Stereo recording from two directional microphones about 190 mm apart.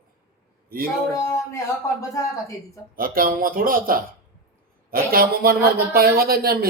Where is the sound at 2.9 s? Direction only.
50° right (ahead or behind).